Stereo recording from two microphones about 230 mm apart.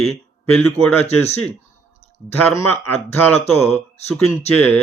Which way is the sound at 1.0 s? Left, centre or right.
Left.